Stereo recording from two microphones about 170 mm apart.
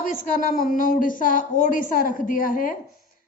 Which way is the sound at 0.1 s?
50° left (ahead or behind).